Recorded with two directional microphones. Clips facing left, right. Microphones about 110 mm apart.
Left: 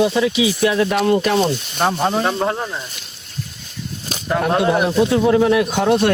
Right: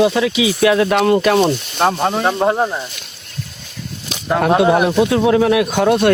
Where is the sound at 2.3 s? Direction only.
35° right (ahead or behind).